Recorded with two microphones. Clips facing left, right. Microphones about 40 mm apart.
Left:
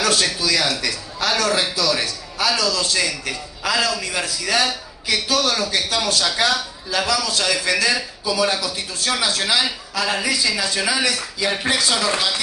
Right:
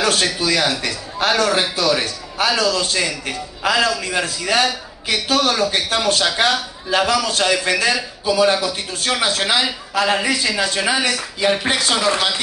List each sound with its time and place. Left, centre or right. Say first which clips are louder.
0.0 s a man's voice: right 2 dB; right